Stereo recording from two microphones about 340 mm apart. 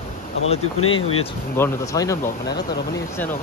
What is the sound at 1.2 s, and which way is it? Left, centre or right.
Speech, centre.